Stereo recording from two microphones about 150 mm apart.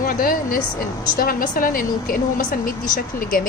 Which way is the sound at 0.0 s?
70° left (ahead or behind).